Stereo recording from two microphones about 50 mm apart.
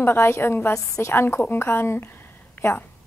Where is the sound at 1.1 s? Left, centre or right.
Left.